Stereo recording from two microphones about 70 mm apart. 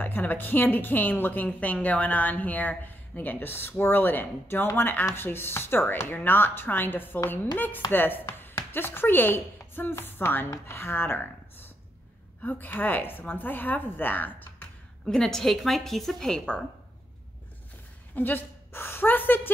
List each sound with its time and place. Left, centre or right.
0.0 s a woman's voice: left
12.4 s a woman's voice: left
15.0 s a woman's voice: centre
18.1 s a woman's voice: left